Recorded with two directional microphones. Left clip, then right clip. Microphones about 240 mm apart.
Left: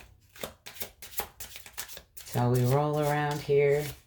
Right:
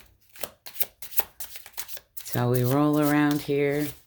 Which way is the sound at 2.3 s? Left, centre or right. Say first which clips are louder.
Right 3 dB; right.